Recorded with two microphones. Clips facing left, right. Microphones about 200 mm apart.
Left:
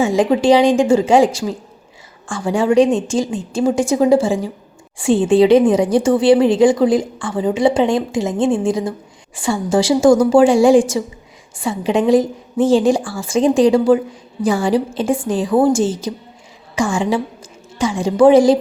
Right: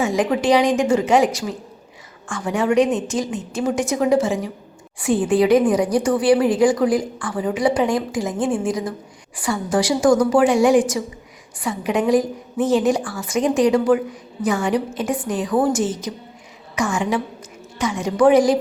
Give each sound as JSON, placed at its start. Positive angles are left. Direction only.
{"t": 0.0, "sound": "a woman's voice", "side_deg": 25}